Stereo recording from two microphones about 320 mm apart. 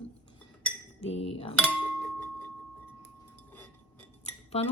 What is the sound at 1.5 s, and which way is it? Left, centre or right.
Glass, centre.